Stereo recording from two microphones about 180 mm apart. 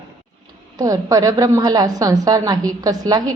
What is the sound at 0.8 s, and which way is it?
A woman's voice, 20° right (ahead or behind).